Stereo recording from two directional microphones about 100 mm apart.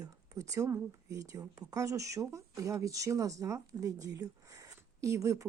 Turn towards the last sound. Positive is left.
turn(degrees=-30)  # may be behind; listen again after turning